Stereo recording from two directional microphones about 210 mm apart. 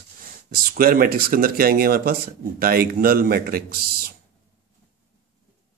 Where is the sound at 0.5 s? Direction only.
45° right (ahead or behind).